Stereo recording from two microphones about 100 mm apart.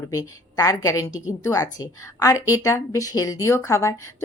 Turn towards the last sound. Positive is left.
turn(degrees=30)  # may be behind; listen again after turning